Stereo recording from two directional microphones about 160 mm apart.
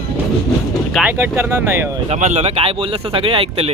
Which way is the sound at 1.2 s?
15° right (ahead or behind).